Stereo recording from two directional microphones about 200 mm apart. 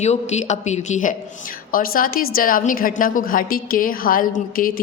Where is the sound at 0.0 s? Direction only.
35° left (ahead or behind).